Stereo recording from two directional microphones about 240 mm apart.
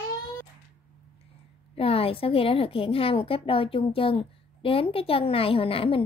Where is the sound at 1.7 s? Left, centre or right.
Left.